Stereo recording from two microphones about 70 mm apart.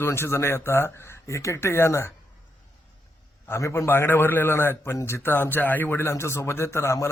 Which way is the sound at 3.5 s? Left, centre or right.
Left.